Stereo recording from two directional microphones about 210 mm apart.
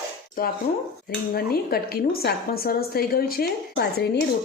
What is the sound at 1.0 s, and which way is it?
Speech, 45° left (ahead or behind).